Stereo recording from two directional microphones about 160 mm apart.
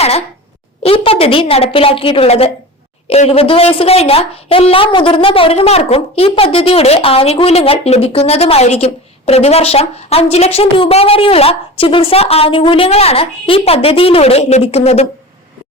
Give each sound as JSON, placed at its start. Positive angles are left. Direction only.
{"t": 0.8, "sound": "a woman's voice", "side_deg": 35}